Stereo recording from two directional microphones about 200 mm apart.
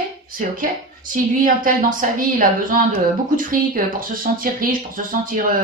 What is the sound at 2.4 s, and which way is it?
Speech, 45° right (ahead or behind).